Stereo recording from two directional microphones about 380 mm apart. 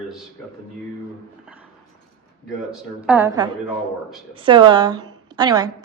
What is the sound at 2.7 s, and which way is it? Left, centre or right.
Speech, centre.